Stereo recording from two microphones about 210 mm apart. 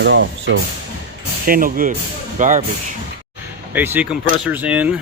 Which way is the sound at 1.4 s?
40° right (ahead or behind).